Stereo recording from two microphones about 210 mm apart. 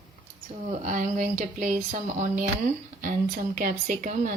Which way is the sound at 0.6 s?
35° right (ahead or behind).